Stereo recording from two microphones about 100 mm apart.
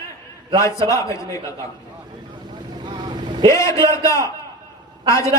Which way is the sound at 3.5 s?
30° left (ahead or behind).